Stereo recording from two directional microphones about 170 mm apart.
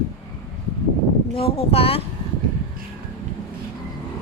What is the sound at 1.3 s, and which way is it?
Speech, 35° left (ahead or behind).